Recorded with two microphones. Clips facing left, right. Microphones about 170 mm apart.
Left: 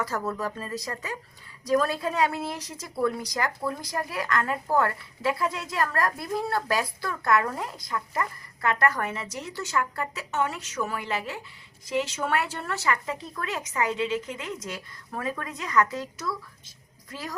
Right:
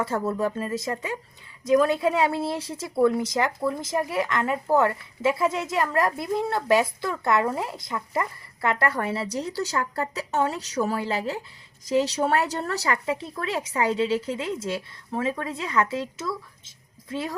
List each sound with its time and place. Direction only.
0.0 s a woman's voice: 25° right (ahead or behind)